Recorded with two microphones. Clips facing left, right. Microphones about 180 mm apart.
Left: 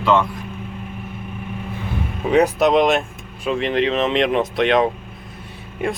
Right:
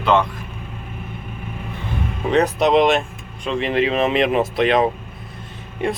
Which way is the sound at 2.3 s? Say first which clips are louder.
Left 1 dB; 10° left (ahead or behind).